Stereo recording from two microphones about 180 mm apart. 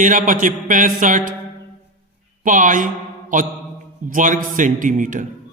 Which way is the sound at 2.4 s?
45° right (ahead or behind).